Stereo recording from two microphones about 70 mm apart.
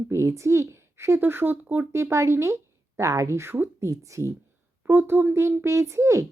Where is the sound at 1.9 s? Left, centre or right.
Right.